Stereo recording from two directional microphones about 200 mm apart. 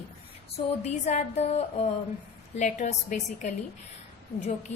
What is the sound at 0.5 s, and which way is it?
A woman's voice, 35° left (ahead or behind).